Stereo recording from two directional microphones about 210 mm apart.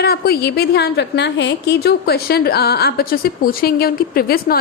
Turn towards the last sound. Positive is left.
turn(degrees=45)  # may be behind; listen again after turning